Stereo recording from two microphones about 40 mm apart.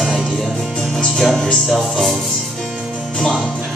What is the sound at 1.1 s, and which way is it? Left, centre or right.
Speech, centre.